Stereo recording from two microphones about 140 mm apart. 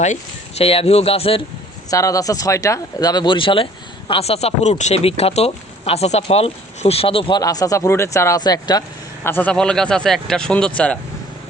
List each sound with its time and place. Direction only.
0.6 s speech: 45° left (ahead or behind)
1.9 s speech: 25° left (ahead or behind)
7.4 s speech: 25° left (ahead or behind)
9.2 s speech: 15° left (ahead or behind)